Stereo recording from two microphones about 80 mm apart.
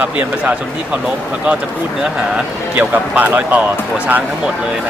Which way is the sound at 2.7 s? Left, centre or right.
Centre.